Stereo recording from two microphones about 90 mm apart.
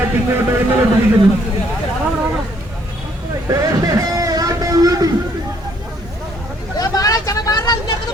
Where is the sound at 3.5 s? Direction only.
40° right (ahead or behind).